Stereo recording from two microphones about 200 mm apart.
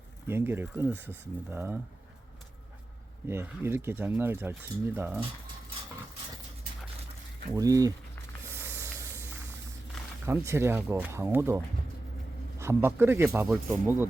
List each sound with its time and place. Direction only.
0.3 s a man's voice: 10° right (ahead or behind)
3.2 s a man's voice: 10° right (ahead or behind)
7.5 s a man's voice: 15° right (ahead or behind)
8.5 s hiss: 10° right (ahead or behind)
10.2 s a man's voice: 15° right (ahead or behind)